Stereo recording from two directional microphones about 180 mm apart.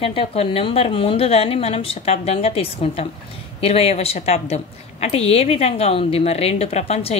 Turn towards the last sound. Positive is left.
turn(degrees=35)  # may be behind; listen again after turning